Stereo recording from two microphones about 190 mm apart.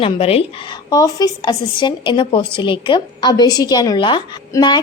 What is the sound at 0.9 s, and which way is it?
Speech, 20° left (ahead or behind).